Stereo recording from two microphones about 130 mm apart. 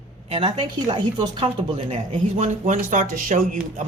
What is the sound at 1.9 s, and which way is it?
Speech, 60° right (ahead or behind).